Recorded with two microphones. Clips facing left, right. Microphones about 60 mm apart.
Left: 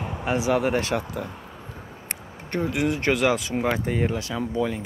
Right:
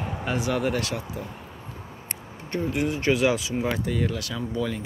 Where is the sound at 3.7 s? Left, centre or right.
Left.